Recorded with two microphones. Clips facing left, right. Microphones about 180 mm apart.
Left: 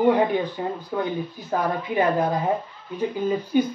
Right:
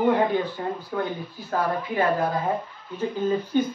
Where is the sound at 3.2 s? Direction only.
10° left (ahead or behind).